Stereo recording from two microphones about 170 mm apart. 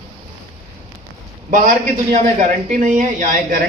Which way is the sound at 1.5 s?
50° right (ahead or behind).